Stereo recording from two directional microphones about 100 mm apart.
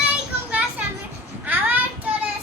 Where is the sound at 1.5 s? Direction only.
15° right (ahead or behind).